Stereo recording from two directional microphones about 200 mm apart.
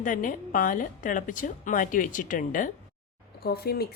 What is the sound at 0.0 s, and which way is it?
A woman's voice, 40° left (ahead or behind).